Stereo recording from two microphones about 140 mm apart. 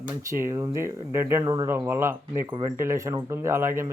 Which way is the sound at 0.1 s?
20° right (ahead or behind).